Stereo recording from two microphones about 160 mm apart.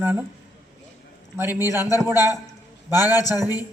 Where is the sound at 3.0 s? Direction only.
25° left (ahead or behind).